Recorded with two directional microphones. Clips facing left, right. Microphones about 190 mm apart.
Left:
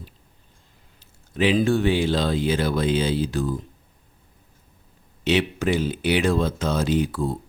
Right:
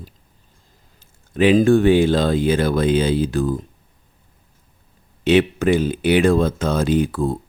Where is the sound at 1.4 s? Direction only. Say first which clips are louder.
Right 6 dB; 50° right (ahead or behind).